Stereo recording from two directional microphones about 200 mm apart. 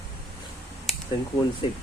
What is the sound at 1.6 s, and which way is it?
Speech, 25° left (ahead or behind).